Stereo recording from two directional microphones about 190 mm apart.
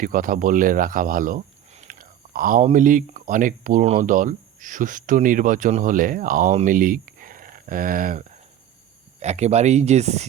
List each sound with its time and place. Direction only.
0.0 s speech: 45° right (ahead or behind)